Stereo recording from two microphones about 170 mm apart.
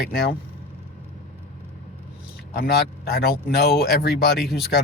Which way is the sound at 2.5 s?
65° left (ahead or behind).